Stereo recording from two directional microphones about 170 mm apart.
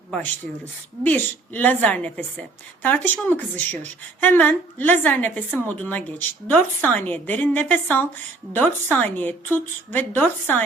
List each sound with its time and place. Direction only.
0.6 s a woman's voice: 10° left (ahead or behind)